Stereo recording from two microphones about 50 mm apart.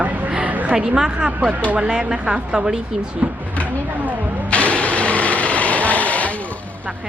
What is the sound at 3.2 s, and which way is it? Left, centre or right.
Speech, right.